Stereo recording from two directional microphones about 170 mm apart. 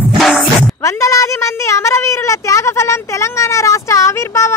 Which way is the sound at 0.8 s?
20° left (ahead or behind).